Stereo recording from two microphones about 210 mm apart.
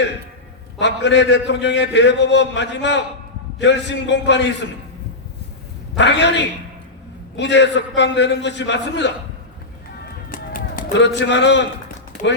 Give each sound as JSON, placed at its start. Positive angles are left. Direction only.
{"t": 0.8, "sound": "a man's voice", "side_deg": 55}
{"t": 6.0, "sound": "a man's voice", "side_deg": 55}
{"t": 10.0, "sound": "run", "side_deg": 40}
{"t": 10.9, "sound": "a man's voice", "side_deg": 60}
{"t": 12.2, "sound": "speech", "side_deg": 35}